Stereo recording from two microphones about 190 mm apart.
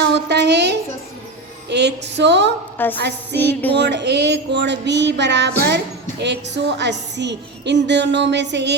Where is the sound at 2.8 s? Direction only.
10° left (ahead or behind).